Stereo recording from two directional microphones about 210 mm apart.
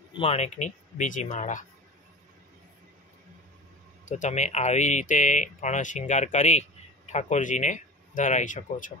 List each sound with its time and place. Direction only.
0.1 s speech: 30° left (ahead or behind)
4.0 s speech: 35° left (ahead or behind)